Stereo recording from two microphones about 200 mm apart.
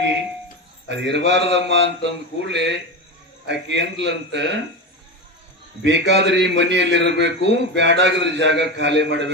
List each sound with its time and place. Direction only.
0.9 s a man's voice: 60° right (ahead or behind)
5.8 s a man's voice: 60° right (ahead or behind)